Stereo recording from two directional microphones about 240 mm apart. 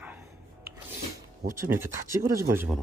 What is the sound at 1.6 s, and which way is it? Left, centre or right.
Speech, centre.